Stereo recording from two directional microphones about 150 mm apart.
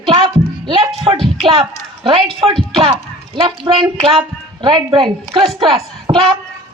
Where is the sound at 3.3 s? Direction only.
35° right (ahead or behind).